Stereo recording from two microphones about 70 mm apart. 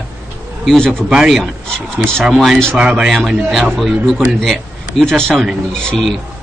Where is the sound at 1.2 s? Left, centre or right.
Centre.